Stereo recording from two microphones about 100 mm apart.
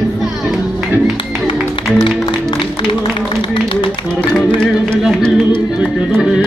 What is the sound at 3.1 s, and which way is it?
Music, 55° left (ahead or behind).